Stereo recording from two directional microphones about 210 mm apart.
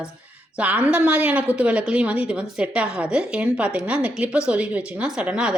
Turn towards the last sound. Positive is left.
turn(degrees=-5)  # may be behind; listen again after turning